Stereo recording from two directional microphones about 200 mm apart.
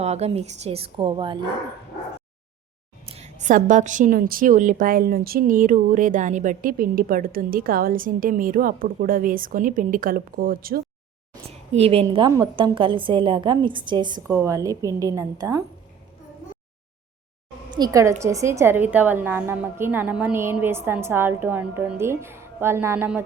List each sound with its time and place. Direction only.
0.0 s a woman's voice: 30° right (ahead or behind)
3.1 s a woman's voice: 35° right (ahead or behind)
11.4 s a woman's voice: 30° right (ahead or behind)
17.7 s a woman's voice: 15° right (ahead or behind)